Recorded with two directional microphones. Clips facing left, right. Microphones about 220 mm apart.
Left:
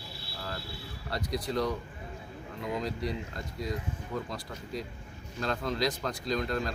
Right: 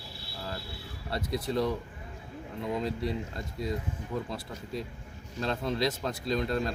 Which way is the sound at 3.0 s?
25° right (ahead or behind).